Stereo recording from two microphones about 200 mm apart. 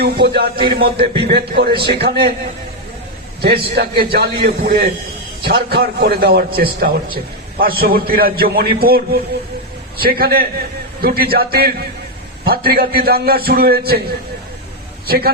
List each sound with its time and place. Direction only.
0.0 s a man's voice: 50° right (ahead or behind)
3.4 s a man's voice: 50° right (ahead or behind)
10.0 s a man's voice: 50° right (ahead or behind)
15.0 s a man's voice: 50° right (ahead or behind)